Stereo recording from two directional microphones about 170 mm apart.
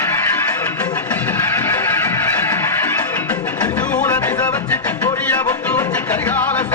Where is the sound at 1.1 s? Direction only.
15° left (ahead or behind).